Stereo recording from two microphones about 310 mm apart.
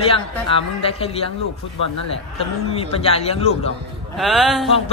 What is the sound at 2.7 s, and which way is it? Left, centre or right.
Speech, centre.